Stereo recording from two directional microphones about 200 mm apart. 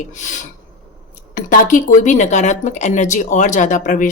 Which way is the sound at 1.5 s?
40° left (ahead or behind).